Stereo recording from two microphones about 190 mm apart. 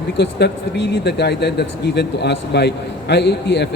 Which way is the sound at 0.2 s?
65° left (ahead or behind).